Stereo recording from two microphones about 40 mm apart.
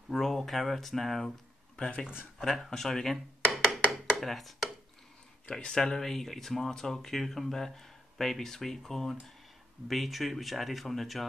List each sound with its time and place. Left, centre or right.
0.1 s speech: centre
2.4 s speech: centre
3.5 s a sound: centre
5.5 s speech: left
5.8 s speech: centre